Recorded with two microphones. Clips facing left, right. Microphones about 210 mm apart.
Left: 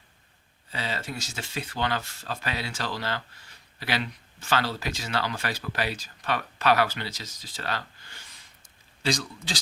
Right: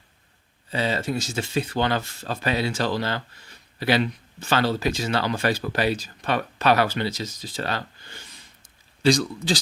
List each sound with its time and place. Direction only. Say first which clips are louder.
0.7 s speech: right 9 dB; 25° right (ahead or behind)
9.0 s speech: right 9 dB; 35° right (ahead or behind)